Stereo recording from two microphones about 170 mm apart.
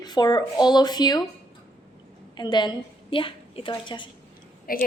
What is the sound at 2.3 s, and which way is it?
A woman's voice, 25° left (ahead or behind).